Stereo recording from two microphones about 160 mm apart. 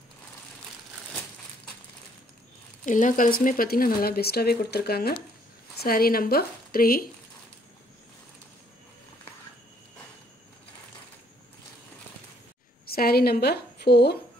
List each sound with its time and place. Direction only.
2.8 s speech: 55° left (ahead or behind)
12.8 s a woman's voice: 70° left (ahead or behind); by 14.2 s 90° left